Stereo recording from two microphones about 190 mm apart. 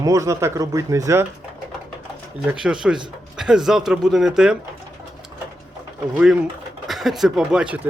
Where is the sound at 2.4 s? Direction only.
5° right (ahead or behind).